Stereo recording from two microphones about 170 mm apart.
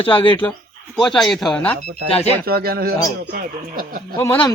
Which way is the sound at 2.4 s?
65° right (ahead or behind).